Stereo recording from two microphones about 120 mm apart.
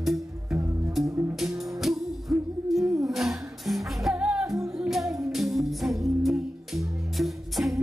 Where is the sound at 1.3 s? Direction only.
Centre (ahead or behind).